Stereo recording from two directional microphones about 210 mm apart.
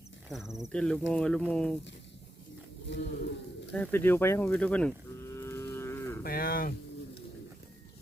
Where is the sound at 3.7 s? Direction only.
10° left (ahead or behind).